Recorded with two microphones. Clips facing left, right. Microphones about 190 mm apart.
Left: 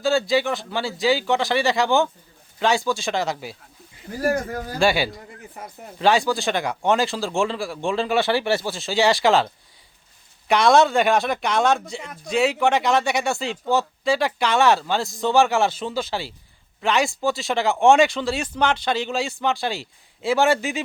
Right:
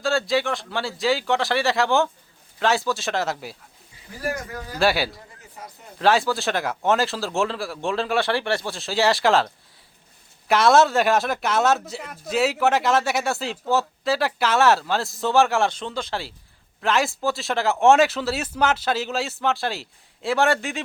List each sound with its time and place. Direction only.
0.0 s speech: centre (ahead or behind)
4.2 s speech: 45° left (ahead or behind)
4.8 s speech: centre (ahead or behind)
10.5 s speech: 5° right (ahead or behind)